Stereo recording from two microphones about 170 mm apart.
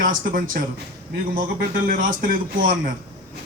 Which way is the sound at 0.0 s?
55° right (ahead or behind).